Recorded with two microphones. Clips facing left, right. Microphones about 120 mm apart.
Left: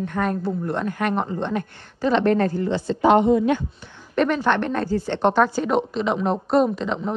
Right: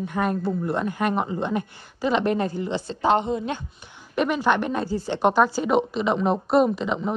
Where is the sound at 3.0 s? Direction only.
30° right (ahead or behind).